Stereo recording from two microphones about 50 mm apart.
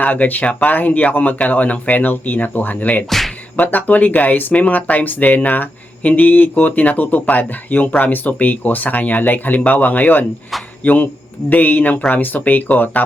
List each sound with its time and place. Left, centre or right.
0.0 s speech: left
3.1 s music: centre
3.6 s speech: left